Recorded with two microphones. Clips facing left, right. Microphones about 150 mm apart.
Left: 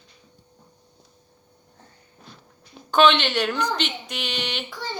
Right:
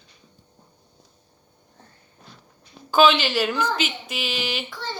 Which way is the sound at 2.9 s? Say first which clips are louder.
Even; 5° right (ahead or behind).